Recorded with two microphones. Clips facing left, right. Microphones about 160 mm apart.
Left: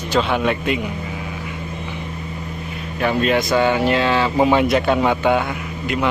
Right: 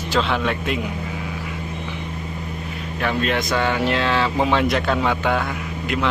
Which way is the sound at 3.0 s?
5° left (ahead or behind).